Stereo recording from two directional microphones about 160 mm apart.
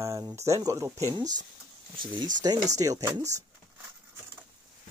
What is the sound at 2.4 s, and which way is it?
Speech, 20° right (ahead or behind).